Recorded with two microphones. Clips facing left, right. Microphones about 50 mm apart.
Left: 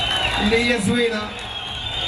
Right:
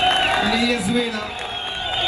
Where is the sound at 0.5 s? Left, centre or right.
Left.